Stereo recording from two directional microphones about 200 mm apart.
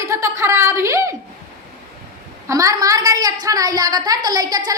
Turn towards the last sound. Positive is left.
turn(degrees=-20)  # may be behind; listen again after turning